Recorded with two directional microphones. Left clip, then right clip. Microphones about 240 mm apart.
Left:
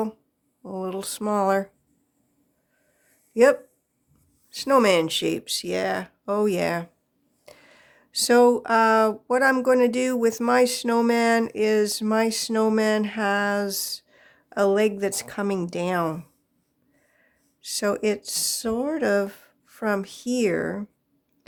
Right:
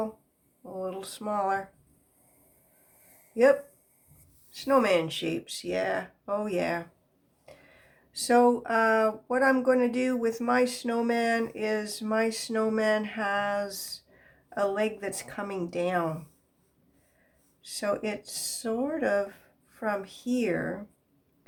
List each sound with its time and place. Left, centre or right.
0.6 s speech: left
3.3 s speech: left
17.6 s speech: left